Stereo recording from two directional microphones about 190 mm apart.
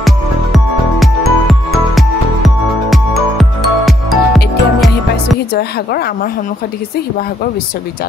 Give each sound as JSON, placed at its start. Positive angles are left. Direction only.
{"t": 0.0, "sound": "music", "side_deg": 0}
{"t": 5.5, "sound": "a woman's voice", "side_deg": 55}